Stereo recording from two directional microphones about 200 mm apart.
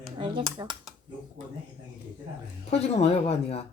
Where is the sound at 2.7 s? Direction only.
30° left (ahead or behind).